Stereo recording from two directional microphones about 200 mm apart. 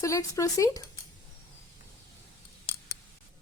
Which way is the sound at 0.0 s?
15° left (ahead or behind).